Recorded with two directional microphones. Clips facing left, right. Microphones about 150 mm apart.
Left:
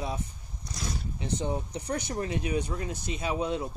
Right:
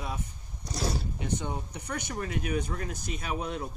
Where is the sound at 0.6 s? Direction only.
35° right (ahead or behind).